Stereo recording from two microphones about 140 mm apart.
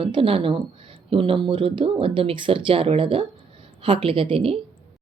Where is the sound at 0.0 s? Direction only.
40° right (ahead or behind).